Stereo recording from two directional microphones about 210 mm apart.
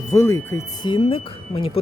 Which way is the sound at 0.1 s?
15° left (ahead or behind).